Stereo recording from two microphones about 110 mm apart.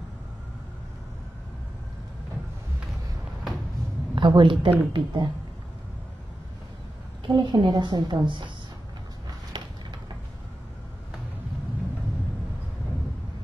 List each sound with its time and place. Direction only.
4.1 s a woman's voice: 45° right (ahead or behind)
7.2 s a woman's voice: 45° right (ahead or behind)
9.5 s a sound: 45° right (ahead or behind)